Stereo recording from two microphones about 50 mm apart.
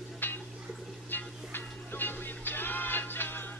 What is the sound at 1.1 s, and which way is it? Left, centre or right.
Music, left.